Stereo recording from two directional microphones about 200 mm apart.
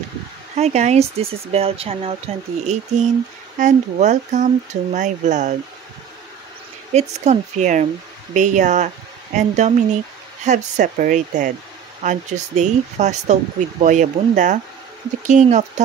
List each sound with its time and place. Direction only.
0.6 s speech: 35° right (ahead or behind)
6.9 s speech: 35° right (ahead or behind)